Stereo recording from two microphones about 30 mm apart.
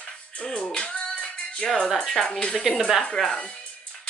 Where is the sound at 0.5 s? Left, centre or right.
Left.